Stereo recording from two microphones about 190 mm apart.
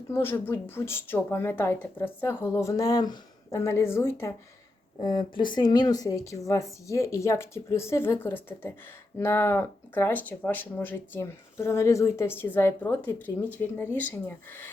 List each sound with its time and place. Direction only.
0.1 s speech: 10° left (ahead or behind)